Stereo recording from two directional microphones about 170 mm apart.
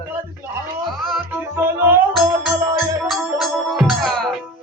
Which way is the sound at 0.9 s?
Centre (ahead or behind).